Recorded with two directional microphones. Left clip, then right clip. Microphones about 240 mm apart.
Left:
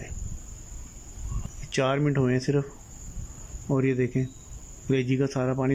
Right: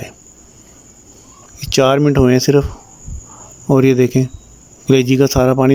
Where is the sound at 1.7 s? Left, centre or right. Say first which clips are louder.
Right 14 dB; right.